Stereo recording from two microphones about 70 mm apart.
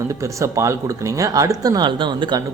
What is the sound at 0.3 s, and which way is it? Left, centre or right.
A man's voice, right.